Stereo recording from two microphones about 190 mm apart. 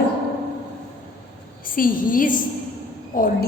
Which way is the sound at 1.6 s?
45° left (ahead or behind).